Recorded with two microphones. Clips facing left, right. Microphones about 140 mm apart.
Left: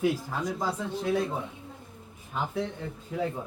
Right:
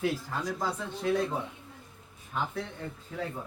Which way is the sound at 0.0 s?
15° left (ahead or behind).